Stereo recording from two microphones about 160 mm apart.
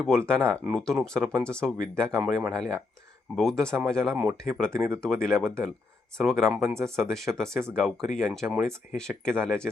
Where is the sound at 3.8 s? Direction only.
5° left (ahead or behind).